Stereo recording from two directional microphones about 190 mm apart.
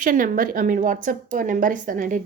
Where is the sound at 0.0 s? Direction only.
45° right (ahead or behind).